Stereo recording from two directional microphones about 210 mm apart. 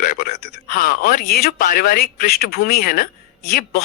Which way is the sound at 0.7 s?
40° left (ahead or behind).